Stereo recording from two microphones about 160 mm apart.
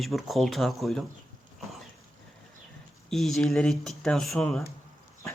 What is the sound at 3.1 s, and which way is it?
Speech, centre (ahead or behind).